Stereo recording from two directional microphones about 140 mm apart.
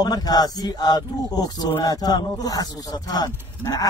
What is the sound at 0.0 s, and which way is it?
Speech, 30° left (ahead or behind).